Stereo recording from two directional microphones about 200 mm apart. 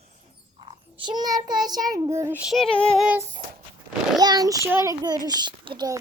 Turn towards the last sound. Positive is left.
turn(degrees=-25)  # may be behind; listen again after turning